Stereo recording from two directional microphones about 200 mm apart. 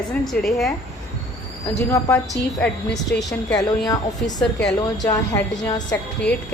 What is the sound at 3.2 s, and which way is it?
Speech, centre (ahead or behind).